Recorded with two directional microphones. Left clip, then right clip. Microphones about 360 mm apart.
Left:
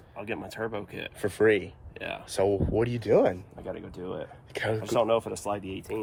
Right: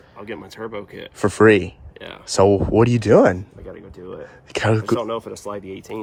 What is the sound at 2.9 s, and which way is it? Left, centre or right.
Speech, right.